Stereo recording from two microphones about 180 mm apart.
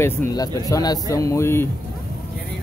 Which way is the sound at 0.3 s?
20° left (ahead or behind).